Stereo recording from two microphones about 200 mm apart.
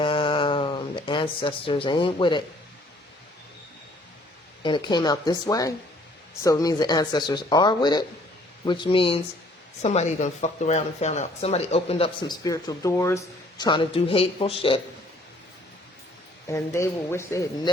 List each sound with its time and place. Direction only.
0.0 s a sound: 25° left (ahead or behind)
4.6 s speech: 20° left (ahead or behind)
16.5 s speech: 15° left (ahead or behind)